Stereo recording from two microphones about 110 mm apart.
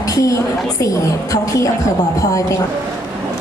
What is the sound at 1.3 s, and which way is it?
Speech, 30° left (ahead or behind).